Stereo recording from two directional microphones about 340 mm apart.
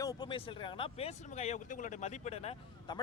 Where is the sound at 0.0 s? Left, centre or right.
Centre.